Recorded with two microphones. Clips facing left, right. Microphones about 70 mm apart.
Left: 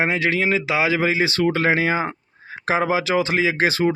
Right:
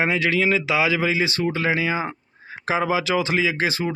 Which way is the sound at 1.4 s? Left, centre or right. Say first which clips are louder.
Left 4 dB; left.